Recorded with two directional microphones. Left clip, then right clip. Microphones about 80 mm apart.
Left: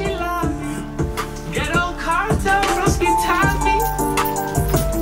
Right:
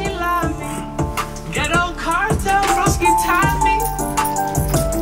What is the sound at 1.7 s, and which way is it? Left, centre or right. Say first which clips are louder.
Music: right 1 dB; right.